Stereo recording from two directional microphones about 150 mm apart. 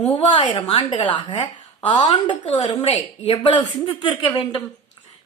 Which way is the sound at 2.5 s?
45° left (ahead or behind).